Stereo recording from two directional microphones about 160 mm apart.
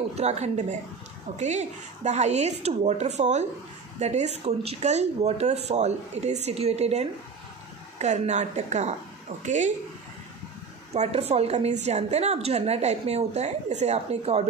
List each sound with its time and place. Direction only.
0.2 s a woman's voice: 45° right (ahead or behind)
10.9 s a woman's voice: 45° right (ahead or behind)